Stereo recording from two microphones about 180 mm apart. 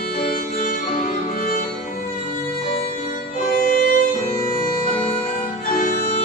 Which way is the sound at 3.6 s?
50° left (ahead or behind).